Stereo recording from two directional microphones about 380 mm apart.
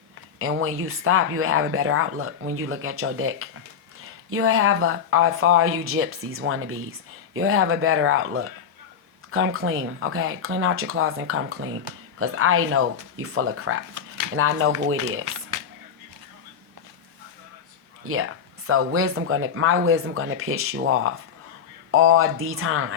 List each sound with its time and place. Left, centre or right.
0.3 s speech: right
15.2 s a sound: right
18.0 s speech: right